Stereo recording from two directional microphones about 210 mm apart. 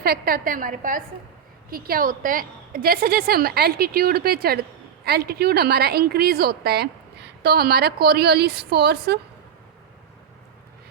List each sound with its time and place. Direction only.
0.0 s a woman's voice: 45° right (ahead or behind)